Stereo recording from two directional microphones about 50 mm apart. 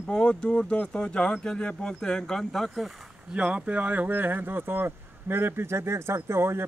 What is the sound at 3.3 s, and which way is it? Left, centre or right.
Speech, right.